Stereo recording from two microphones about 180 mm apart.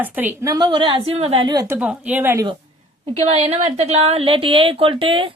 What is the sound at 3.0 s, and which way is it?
A woman's voice, 35° right (ahead or behind).